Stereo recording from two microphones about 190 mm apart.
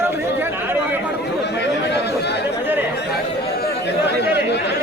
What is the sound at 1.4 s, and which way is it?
Speech, 65° left (ahead or behind).